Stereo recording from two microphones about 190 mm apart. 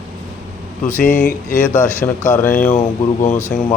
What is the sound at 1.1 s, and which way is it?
Speech, 45° left (ahead or behind).